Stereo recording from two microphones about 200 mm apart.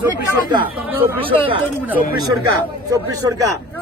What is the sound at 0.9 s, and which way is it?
Speech, 10° right (ahead or behind).